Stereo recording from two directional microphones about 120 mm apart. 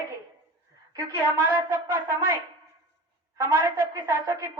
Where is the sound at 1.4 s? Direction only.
20° right (ahead or behind).